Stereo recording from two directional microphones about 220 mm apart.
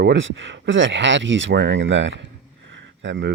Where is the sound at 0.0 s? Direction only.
55° right (ahead or behind).